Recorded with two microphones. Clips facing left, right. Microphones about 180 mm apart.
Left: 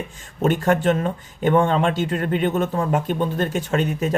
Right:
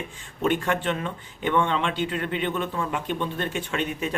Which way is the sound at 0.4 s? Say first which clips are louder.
Left 6 dB; 40° left (ahead or behind).